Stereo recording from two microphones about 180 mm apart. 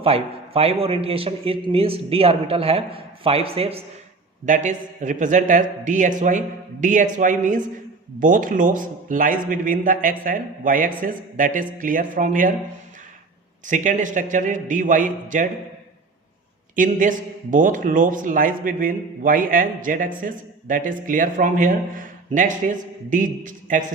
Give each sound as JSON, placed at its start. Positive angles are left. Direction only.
{"t": 0.0, "sound": "a man's voice", "side_deg": -30}
{"t": 4.4, "sound": "a man's voice", "side_deg": -45}
{"t": 13.7, "sound": "a man's voice", "side_deg": -45}
{"t": 16.7, "sound": "a man's voice", "side_deg": -45}